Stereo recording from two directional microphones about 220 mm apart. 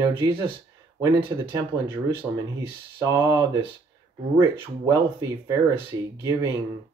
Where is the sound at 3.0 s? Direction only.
15° right (ahead or behind).